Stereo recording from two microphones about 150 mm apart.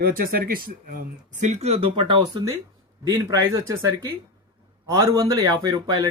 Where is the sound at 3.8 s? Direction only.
20° right (ahead or behind).